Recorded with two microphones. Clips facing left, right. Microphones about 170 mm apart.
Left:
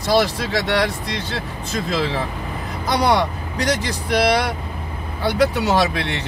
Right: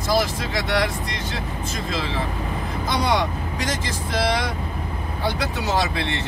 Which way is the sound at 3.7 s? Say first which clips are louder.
Left 9 dB; 70° left (ahead or behind).